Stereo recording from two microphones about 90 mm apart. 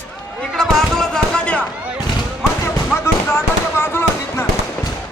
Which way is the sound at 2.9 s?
25° left (ahead or behind).